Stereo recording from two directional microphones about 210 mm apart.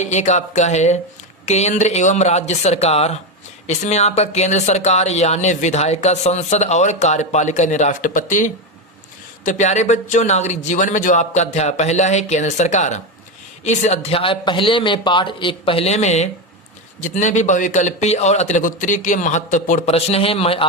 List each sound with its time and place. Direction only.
0.0 s a man's voice: 35° left (ahead or behind)